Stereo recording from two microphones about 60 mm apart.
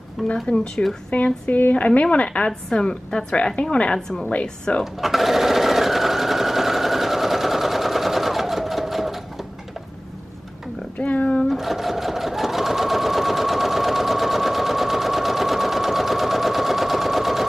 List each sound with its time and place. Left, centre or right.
0.2 s speech: centre
0.8 s a woman's voice: centre
5.0 s sewing machine: centre
11.0 s cat: left
11.4 s sewing machine: centre